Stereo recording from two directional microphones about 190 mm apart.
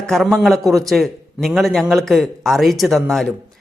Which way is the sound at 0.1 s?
Centre (ahead or behind).